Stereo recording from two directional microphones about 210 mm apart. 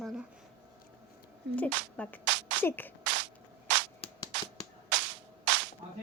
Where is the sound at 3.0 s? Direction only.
60° right (ahead or behind).